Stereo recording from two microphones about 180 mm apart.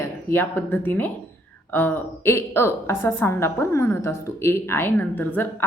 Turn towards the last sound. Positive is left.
turn(degrees=10)  # may be behind; listen again after turning